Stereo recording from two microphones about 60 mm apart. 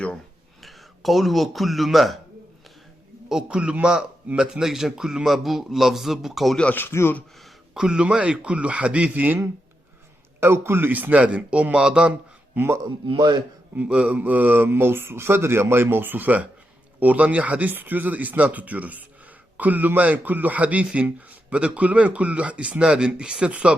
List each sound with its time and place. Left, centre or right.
0.6 s speech: centre
3.2 s a man's voice: centre
6.7 s speech: left
7.7 s a man's voice: centre; by 9.4 s right
10.4 s a man's voice: right; by 12.1 s centre
12.5 s a man's voice: right
13.7 s a man's voice: centre